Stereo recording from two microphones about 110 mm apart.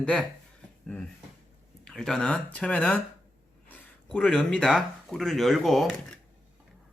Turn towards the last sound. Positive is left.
turn(degrees=0)  # may be behind; listen again after turning